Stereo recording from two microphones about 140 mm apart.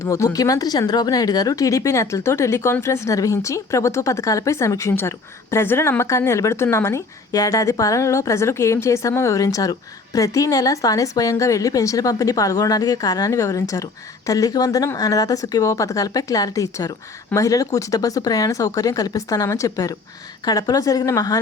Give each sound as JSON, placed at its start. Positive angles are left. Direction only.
{"t": 0.0, "sound": "speech", "side_deg": 25}